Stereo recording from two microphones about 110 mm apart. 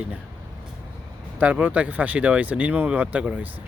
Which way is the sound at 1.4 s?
15° right (ahead or behind).